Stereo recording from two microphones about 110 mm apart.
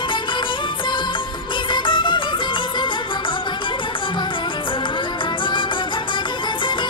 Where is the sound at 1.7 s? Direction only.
45° left (ahead or behind).